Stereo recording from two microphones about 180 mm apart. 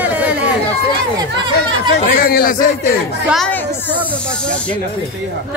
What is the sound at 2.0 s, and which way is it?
Speech, 55° left (ahead or behind).